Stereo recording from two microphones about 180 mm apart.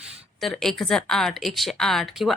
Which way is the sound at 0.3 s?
Centre (ahead or behind).